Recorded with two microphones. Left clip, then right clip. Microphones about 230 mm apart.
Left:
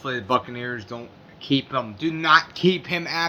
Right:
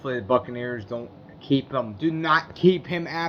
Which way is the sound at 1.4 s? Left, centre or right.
Centre.